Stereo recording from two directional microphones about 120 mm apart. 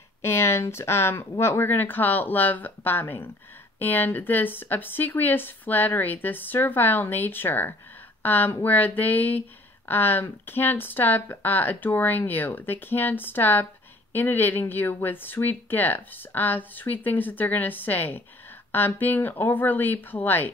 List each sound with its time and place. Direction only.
0.2 s speech: 20° left (ahead or behind)